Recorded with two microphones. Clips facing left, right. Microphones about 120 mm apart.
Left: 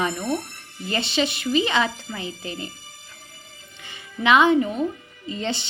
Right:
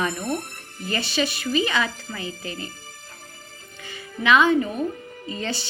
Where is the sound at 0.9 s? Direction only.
20° left (ahead or behind).